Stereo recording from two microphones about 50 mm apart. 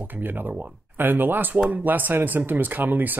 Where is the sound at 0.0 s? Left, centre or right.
Right.